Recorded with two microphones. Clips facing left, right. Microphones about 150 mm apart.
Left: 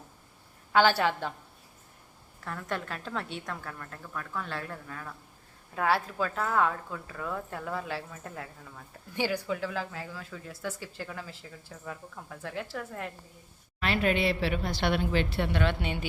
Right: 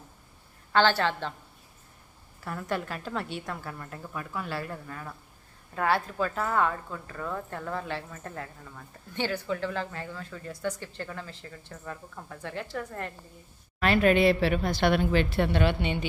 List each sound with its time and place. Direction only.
0.7 s a woman's voice: 10° left (ahead or behind)
2.4 s a woman's voice: 5° right (ahead or behind)
13.7 s a woman's voice: 50° right (ahead or behind)
15.6 s a woman's voice: 5° left (ahead or behind)